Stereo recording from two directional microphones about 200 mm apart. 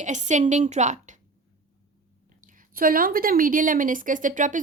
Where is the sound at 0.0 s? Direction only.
35° right (ahead or behind).